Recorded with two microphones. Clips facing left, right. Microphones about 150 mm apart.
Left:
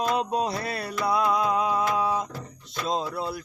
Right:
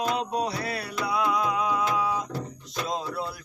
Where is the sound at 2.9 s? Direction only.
30° left (ahead or behind).